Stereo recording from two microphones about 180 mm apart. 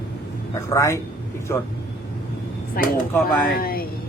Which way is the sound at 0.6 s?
15° left (ahead or behind).